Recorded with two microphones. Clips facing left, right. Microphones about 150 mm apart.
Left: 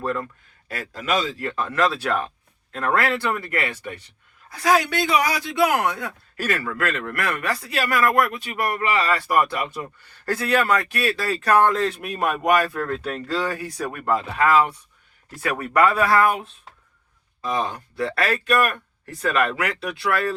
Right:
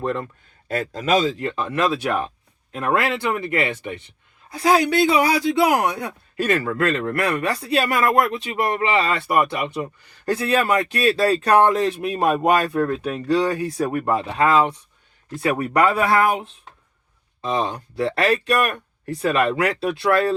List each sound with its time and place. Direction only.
0.0 s speech: 25° right (ahead or behind)
13.4 s speech: 30° right (ahead or behind)